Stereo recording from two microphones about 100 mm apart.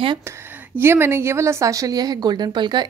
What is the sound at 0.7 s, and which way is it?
A woman's voice, 25° right (ahead or behind).